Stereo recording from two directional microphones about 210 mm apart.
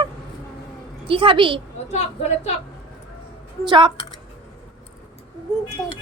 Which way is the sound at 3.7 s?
20° right (ahead or behind).